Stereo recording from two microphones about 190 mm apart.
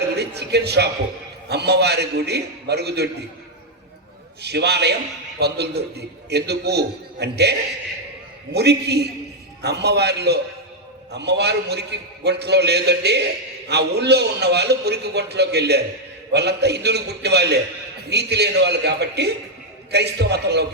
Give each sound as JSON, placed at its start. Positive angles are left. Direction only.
{"t": 0.2, "sound": "a man's voice", "side_deg": -60}
{"t": 4.4, "sound": "a man's voice", "side_deg": -60}
{"t": 8.5, "sound": "a man's voice", "side_deg": -60}